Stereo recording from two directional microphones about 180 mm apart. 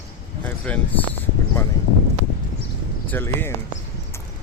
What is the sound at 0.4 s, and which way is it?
Speech, 10° left (ahead or behind).